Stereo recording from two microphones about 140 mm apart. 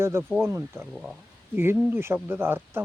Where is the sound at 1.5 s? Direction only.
15° right (ahead or behind).